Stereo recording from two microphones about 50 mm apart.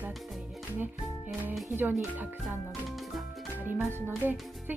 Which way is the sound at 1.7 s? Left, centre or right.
Right.